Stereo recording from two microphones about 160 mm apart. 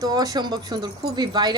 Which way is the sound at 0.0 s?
25° right (ahead or behind).